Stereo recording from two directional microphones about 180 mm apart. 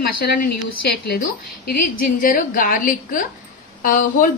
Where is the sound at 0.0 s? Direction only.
60° left (ahead or behind).